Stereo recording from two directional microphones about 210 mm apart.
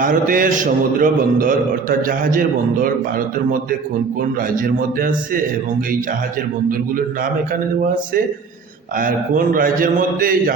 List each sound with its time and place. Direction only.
0.0 s a man's voice: 40° right (ahead or behind)
6.7 s a man's voice: 40° right (ahead or behind)
9.0 s a man's voice: 40° right (ahead or behind)